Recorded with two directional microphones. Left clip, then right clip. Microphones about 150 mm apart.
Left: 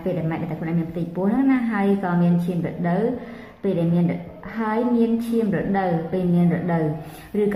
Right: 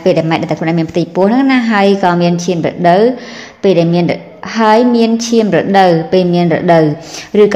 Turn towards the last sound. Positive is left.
turn(degrees=-50)  # may be behind; listen again after turning